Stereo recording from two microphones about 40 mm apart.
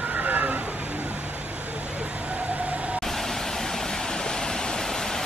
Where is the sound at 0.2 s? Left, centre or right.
Right.